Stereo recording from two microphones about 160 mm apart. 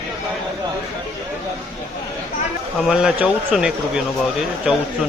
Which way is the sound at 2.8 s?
5° right (ahead or behind).